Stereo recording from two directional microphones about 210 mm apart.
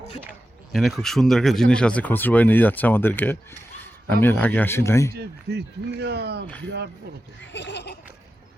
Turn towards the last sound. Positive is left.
turn(degrees=55)  # may be behind; listen again after turning